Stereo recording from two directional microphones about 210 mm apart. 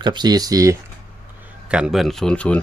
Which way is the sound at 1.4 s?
5° right (ahead or behind).